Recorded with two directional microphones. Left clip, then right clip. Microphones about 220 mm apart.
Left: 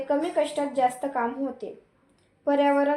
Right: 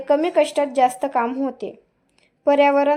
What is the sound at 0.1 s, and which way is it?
A woman's voice, 30° right (ahead or behind).